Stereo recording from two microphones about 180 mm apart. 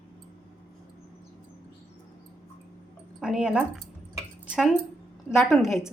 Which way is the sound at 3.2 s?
5° right (ahead or behind).